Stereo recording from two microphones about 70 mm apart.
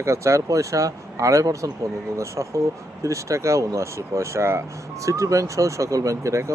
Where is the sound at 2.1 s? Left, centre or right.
Right.